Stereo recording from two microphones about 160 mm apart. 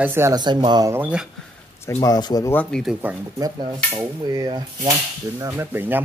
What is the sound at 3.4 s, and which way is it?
Speech, 25° right (ahead or behind).